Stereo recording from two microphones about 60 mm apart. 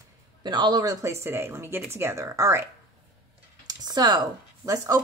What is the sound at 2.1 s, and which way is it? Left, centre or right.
Speech, right.